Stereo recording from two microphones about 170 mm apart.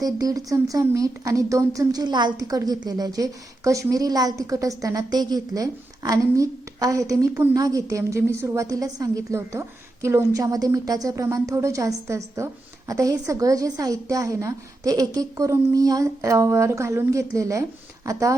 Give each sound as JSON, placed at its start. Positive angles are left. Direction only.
{"t": 0.0, "sound": "speech", "side_deg": -20}